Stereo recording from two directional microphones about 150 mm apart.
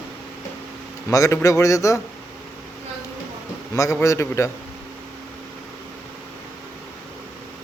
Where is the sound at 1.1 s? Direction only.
20° left (ahead or behind).